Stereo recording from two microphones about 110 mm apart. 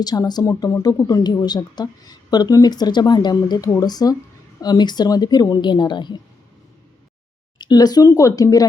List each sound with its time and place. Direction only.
0.0 s speech: 35° left (ahead or behind)
7.6 s speech: 35° left (ahead or behind)